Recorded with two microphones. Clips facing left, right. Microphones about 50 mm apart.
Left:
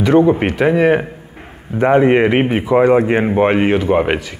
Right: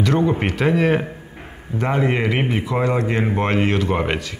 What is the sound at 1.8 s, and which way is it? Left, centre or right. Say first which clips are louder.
Speech: left 9 dB; left.